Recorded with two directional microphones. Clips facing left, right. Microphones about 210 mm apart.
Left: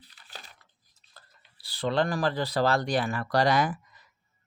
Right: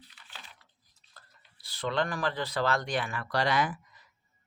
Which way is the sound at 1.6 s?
35° left (ahead or behind).